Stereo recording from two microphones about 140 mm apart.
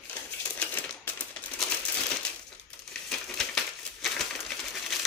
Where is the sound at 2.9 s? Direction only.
5° left (ahead or behind).